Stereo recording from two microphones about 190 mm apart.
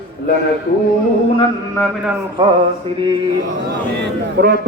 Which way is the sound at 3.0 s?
25° right (ahead or behind).